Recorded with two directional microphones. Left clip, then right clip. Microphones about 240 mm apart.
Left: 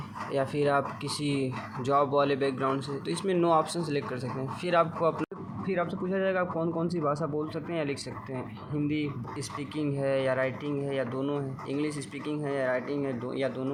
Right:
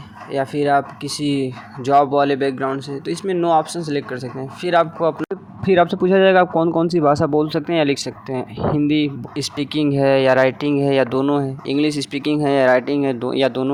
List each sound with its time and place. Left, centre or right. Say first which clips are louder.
0.3 s speech: right 9 dB; right
5.7 s speech: right 16 dB; right